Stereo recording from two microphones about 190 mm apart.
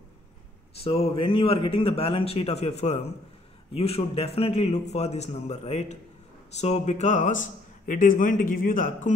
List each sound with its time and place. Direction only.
0.8 s a man's voice: 30° left (ahead or behind)